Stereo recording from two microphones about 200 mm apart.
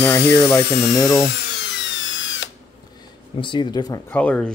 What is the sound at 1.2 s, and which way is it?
Tools, 55° left (ahead or behind).